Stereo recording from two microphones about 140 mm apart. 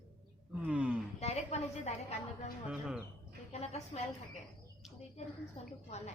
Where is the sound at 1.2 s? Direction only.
50° left (ahead or behind).